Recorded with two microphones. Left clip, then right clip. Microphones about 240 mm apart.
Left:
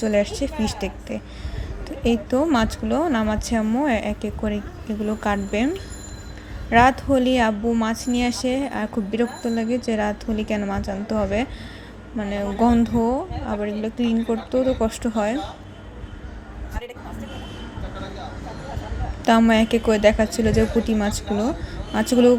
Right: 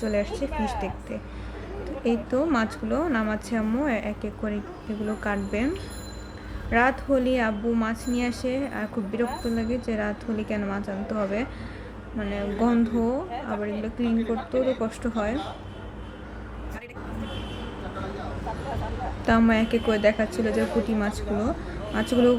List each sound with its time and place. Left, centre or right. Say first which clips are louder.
0.0 s a woman's voice: left 6 dB; centre
19.2 s a woman's voice: left 5 dB; centre